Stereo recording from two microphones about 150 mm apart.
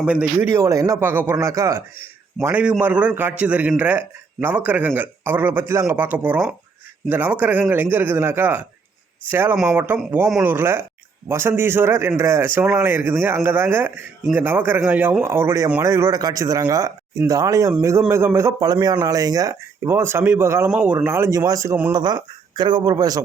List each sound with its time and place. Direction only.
0.0 s a man's voice: 10° right (ahead or behind)
0.5 s a man's voice: 25° right (ahead or behind)
21.9 s speech: 30° right (ahead or behind)